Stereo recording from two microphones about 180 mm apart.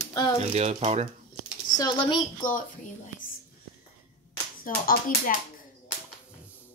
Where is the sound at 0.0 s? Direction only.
20° left (ahead or behind).